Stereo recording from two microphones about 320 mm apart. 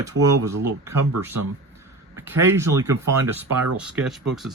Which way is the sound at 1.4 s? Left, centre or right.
Right.